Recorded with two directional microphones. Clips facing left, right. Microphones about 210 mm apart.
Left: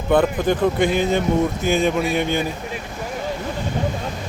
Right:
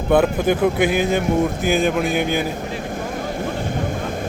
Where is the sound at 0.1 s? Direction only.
10° right (ahead or behind).